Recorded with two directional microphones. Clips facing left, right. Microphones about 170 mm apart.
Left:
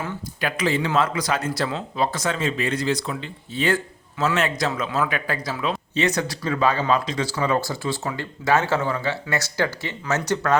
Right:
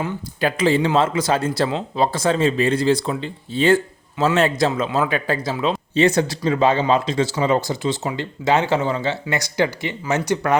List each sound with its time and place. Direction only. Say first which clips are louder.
0.3 s a man's voice: right 6 dB; 30° right (ahead or behind); by 10.6 s 15° right (ahead or behind)